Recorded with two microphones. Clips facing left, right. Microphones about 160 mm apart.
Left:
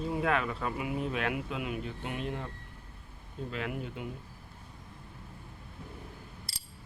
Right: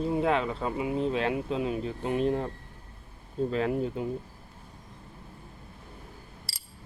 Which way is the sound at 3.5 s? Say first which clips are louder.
Right 7 dB; 35° right (ahead or behind).